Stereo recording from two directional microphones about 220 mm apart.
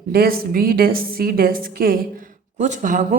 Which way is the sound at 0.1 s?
40° right (ahead or behind).